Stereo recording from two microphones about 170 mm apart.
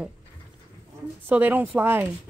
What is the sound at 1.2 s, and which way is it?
Speech, 10° right (ahead or behind).